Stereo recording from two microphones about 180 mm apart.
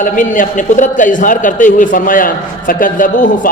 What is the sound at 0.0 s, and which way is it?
A man's voice, 45° left (ahead or behind).